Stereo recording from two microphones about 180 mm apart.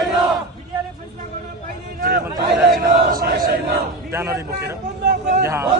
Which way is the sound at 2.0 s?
60° right (ahead or behind).